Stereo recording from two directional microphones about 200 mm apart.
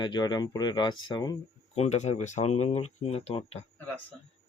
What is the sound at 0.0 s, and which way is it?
Speech, 20° left (ahead or behind).